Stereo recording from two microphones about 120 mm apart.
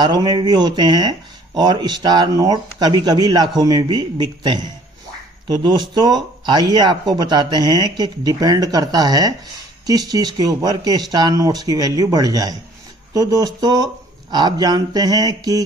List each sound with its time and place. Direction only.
0.0 s speech: 35° right (ahead or behind)